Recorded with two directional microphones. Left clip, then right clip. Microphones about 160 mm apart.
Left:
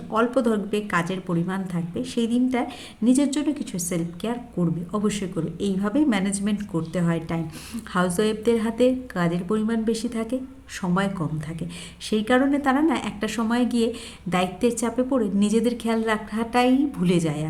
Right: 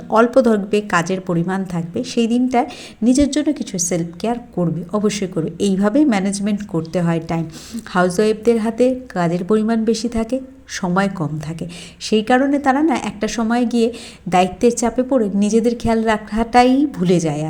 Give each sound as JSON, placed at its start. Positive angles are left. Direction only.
{"t": 0.1, "sound": "a woman's voice", "side_deg": -30}